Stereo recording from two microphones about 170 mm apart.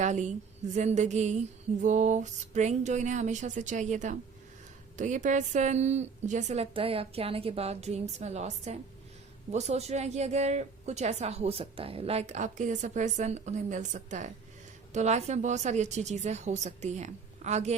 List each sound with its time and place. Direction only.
0.0 s a woman's voice: 45° right (ahead or behind)